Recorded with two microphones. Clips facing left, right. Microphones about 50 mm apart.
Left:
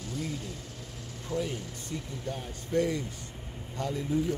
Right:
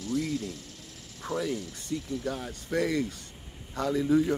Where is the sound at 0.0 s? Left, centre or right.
Right.